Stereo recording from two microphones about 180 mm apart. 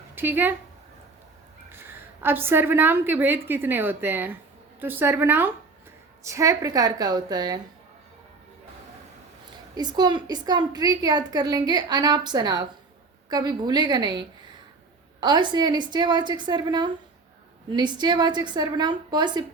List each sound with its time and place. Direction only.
0.2 s speech: 10° right (ahead or behind)
1.7 s a woman's voice: 10° right (ahead or behind)
9.7 s a woman's voice: 20° right (ahead or behind)